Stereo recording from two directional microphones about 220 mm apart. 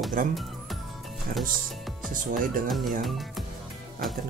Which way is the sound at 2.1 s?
35° right (ahead or behind).